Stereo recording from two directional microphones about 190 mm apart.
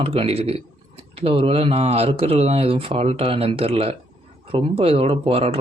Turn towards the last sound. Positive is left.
turn(degrees=-30)  # may be behind; listen again after turning